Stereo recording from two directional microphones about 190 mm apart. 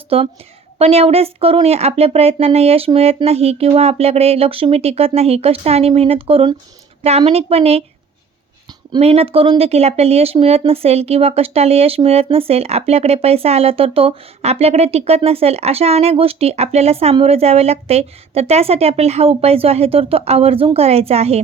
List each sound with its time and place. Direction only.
0.1 s speech: 30° right (ahead or behind)
8.9 s speech: 30° right (ahead or behind)